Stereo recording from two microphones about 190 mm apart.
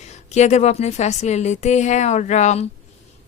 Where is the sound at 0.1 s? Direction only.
35° left (ahead or behind).